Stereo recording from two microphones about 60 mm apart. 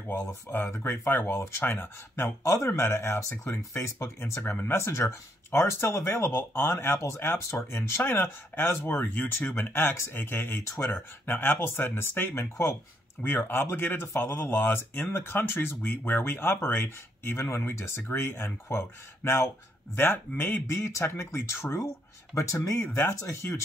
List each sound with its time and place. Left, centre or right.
0.1 s speech: left
9.0 s speech: left
20.6 s speech: left